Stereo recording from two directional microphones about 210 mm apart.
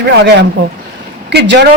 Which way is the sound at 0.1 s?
55° right (ahead or behind).